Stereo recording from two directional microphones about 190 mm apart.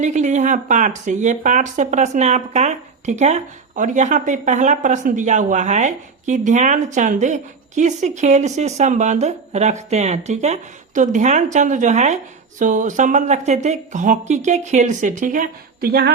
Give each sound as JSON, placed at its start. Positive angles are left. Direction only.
{"t": 0.0, "sound": "speech", "side_deg": -40}